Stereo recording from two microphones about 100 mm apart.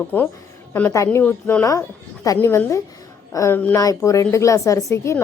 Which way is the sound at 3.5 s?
20° left (ahead or behind).